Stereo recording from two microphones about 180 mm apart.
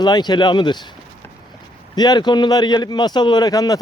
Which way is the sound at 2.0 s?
25° left (ahead or behind).